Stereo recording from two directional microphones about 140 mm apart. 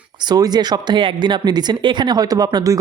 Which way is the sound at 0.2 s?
30° right (ahead or behind).